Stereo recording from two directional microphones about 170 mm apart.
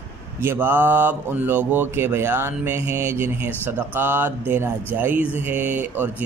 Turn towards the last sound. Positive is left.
turn(degrees=-10)  # may be behind; listen again after turning